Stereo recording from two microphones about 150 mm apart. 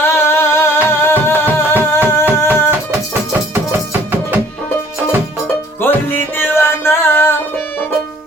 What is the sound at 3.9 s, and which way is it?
Music, 15° right (ahead or behind).